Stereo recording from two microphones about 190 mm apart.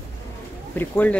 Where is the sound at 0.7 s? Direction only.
10° left (ahead or behind).